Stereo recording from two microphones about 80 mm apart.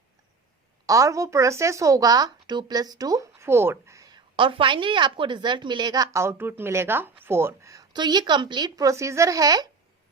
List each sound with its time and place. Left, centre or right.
0.9 s a woman's voice: right
3.3 s a sound: right
4.1 s a woman's voice: right
6.1 s speech: right
7.9 s a woman's voice: right
8.7 s a woman's voice: right